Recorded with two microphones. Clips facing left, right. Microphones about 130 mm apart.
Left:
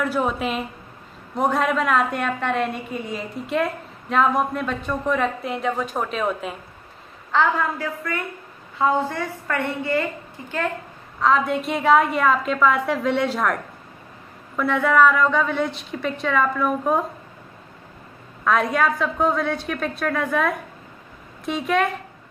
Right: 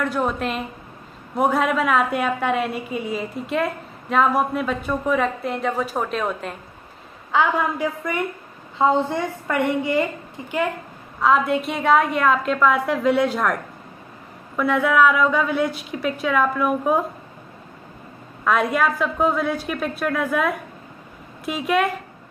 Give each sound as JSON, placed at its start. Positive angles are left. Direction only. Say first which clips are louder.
{"t": 0.0, "sound": "a woman's voice", "louder": "even", "side_deg": 5}
{"t": 7.3, "sound": "a woman's voice", "louder": "right 1 dB", "side_deg": -15}
{"t": 11.1, "sound": "a woman's voice", "louder": "right 1 dB", "side_deg": -5}
{"t": 14.6, "sound": "a woman's voice", "louder": "even", "side_deg": 0}
{"t": 18.4, "sound": "a woman's voice", "louder": "even", "side_deg": 0}